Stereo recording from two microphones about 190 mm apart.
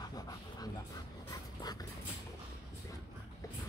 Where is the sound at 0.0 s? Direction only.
20° left (ahead or behind).